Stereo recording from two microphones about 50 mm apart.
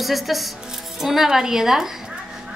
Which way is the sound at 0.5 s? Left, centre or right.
Centre.